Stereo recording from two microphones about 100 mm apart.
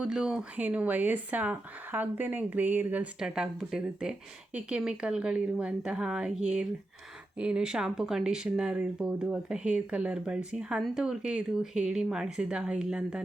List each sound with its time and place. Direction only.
0.0 s speech: 10° right (ahead or behind)
3.2 s speech: 5° right (ahead or behind)